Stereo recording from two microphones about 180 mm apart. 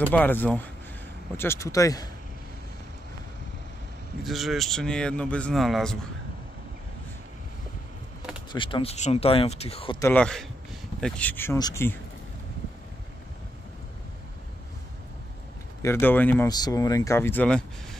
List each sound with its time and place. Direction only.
0.1 s speech: 10° left (ahead or behind)
4.2 s speech: centre (ahead or behind)
8.5 s speech: 25° left (ahead or behind)
9.9 s speech: 10° left (ahead or behind)
15.8 s speech: 10° left (ahead or behind)
16.4 s speech: 20° left (ahead or behind)